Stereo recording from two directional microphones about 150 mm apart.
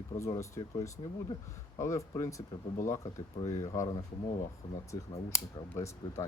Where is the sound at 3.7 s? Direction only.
25° left (ahead or behind).